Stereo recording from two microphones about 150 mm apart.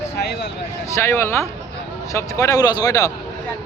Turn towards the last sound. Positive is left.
turn(degrees=25)  # may be behind; listen again after turning